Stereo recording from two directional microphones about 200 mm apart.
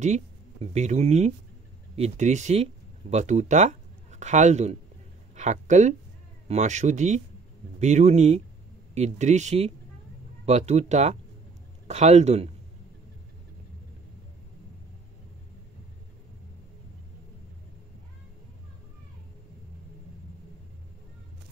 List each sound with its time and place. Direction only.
0.0 s speech: 35° right (ahead or behind)